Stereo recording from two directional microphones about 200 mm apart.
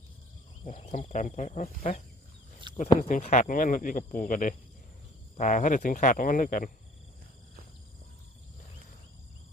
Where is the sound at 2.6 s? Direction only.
25° right (ahead or behind).